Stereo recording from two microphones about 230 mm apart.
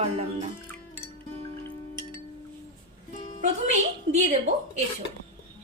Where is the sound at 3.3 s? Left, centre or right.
Right.